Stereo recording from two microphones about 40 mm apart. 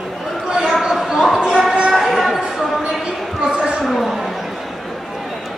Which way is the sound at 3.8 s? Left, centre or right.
Centre.